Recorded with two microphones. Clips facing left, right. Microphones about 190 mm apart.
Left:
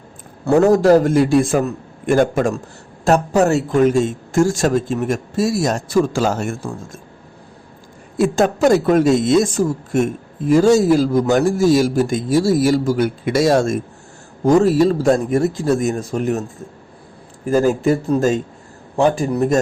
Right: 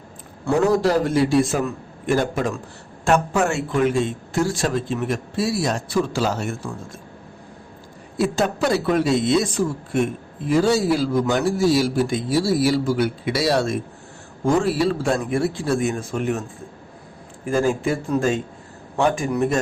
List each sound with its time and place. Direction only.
0.4 s speech: 45° left (ahead or behind)
8.2 s speech: 45° left (ahead or behind)
17.4 s speech: 40° left (ahead or behind)